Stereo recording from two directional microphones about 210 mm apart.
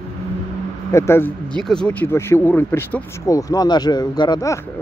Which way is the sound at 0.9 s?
10° left (ahead or behind).